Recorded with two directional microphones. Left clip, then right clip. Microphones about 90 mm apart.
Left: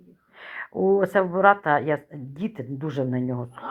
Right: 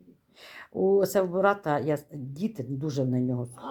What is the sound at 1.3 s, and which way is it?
Speech, 25° right (ahead or behind).